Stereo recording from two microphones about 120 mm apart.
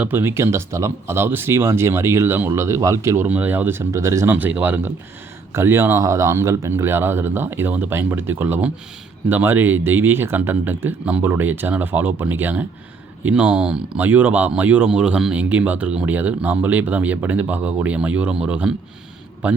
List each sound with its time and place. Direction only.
0.0 s speech: 15° right (ahead or behind)
4.4 s speech: 15° right (ahead or behind)